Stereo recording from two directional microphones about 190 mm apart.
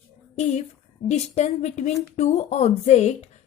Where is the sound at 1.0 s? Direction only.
35° left (ahead or behind).